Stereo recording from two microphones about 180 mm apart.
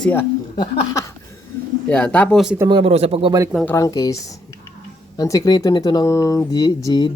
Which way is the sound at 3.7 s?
15° left (ahead or behind).